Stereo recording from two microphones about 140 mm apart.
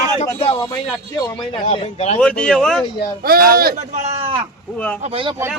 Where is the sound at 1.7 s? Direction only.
45° left (ahead or behind).